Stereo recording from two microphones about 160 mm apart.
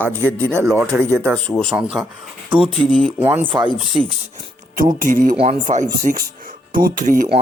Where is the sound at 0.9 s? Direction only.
10° right (ahead or behind).